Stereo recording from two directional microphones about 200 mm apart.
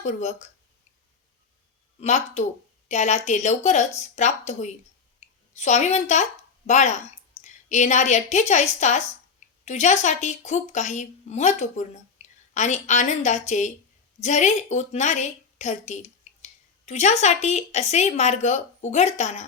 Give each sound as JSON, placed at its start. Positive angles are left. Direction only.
{"t": 0.0, "sound": "a woman's voice", "side_deg": 35}
{"t": 2.0, "sound": "a woman's voice", "side_deg": 35}
{"t": 12.2, "sound": "a sound", "side_deg": 35}
{"t": 12.5, "sound": "a woman's voice", "side_deg": 35}